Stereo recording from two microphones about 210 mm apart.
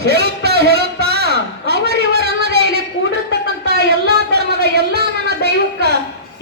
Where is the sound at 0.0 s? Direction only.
50° right (ahead or behind).